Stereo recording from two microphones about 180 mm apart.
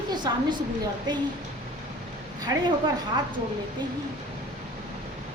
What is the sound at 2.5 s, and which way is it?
Speech, 20° right (ahead or behind).